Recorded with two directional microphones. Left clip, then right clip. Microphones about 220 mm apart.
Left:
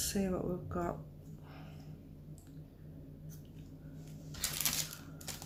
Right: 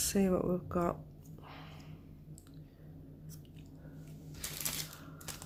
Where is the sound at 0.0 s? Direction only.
40° right (ahead or behind).